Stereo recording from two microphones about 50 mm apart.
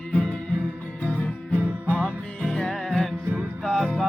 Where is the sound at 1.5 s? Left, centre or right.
Right.